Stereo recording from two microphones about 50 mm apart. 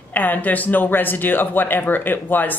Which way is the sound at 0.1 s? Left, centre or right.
Left.